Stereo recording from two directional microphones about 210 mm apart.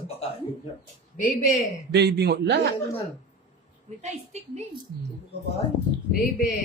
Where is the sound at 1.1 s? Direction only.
40° left (ahead or behind).